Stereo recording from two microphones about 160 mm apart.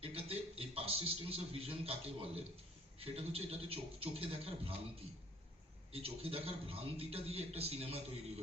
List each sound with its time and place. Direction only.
0.0 s a man's voice: 35° right (ahead or behind)
5.9 s a man's voice: 35° right (ahead or behind)